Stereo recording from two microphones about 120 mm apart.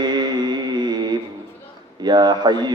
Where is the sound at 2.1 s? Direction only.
35° right (ahead or behind).